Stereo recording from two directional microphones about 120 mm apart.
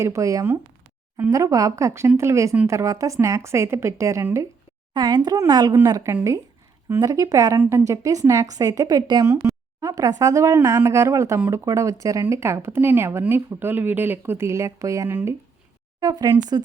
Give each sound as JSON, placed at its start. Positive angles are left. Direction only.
{"t": 0.0, "sound": "speech", "side_deg": -25}
{"t": 4.9, "sound": "a woman's voice", "side_deg": -35}
{"t": 16.0, "sound": "a woman's voice", "side_deg": -30}